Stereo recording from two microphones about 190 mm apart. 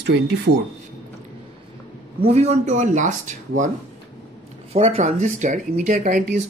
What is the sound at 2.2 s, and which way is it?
Speech, 35° right (ahead or behind).